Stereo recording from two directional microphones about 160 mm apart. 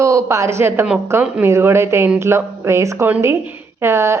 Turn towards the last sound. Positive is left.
turn(degrees=-15)  # may be behind; listen again after turning